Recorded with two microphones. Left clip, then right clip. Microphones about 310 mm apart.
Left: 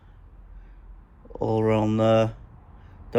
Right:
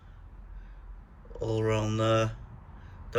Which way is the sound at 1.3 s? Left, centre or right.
Centre.